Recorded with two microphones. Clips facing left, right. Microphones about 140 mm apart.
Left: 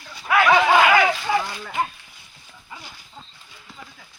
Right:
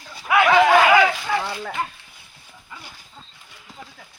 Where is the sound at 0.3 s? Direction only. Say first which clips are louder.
Right 1 dB; 20° right (ahead or behind).